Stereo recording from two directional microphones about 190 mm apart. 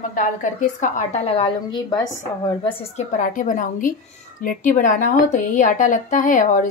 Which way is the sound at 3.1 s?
45° left (ahead or behind).